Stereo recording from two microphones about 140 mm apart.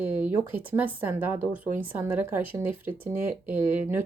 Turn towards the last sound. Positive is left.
turn(degrees=-15)  # may be behind; listen again after turning